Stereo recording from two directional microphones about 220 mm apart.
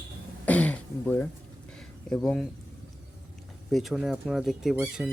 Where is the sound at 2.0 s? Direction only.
Centre (ahead or behind).